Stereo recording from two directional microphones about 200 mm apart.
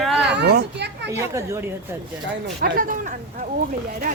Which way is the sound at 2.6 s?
45° right (ahead or behind).